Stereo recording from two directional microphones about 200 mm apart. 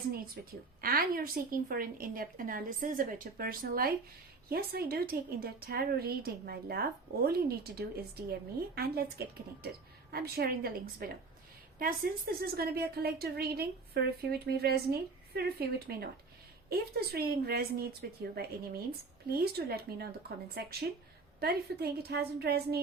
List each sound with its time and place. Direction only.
0.8 s a woman's voice: 45° right (ahead or behind)
16.6 s a woman's voice: 50° right (ahead or behind)